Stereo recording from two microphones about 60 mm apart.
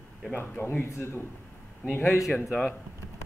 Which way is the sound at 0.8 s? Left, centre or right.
Left.